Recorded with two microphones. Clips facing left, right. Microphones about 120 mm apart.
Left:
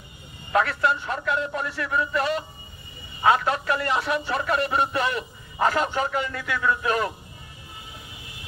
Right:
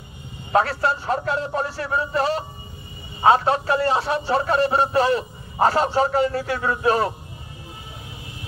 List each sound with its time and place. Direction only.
0.5 s a man's voice: 35° right (ahead or behind)